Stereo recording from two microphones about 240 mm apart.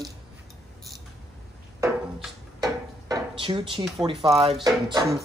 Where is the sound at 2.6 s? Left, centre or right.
Centre.